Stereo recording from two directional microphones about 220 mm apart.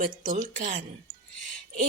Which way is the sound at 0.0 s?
35° right (ahead or behind).